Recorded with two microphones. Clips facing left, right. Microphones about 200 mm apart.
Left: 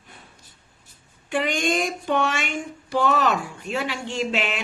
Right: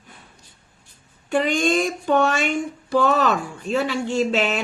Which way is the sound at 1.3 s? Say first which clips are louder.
Right 4 dB; 40° right (ahead or behind).